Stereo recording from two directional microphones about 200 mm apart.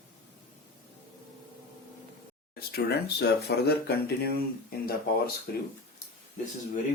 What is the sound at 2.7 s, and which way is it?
Speech, 55° left (ahead or behind).